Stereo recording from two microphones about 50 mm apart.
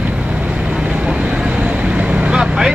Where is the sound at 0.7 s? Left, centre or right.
Centre.